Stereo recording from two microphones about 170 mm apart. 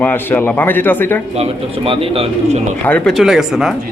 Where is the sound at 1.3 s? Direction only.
35° right (ahead or behind).